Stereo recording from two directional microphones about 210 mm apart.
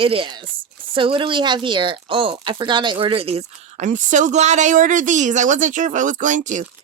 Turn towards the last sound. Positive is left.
turn(degrees=-35)  # may be behind; listen again after turning